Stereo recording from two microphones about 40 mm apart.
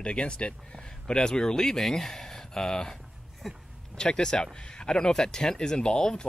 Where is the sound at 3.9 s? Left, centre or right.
Centre.